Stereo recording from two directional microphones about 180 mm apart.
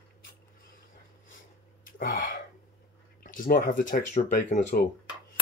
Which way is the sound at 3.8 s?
45° left (ahead or behind).